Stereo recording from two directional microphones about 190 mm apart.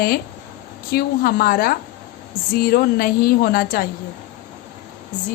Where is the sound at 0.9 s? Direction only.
50° left (ahead or behind).